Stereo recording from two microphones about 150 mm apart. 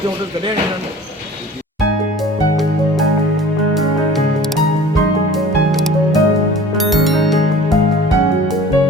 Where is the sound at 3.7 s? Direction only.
Centre (ahead or behind).